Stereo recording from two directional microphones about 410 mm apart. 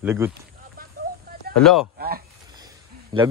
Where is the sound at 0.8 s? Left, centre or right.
Right.